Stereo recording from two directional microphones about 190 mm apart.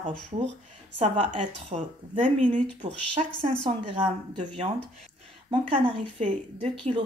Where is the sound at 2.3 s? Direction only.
40° right (ahead or behind).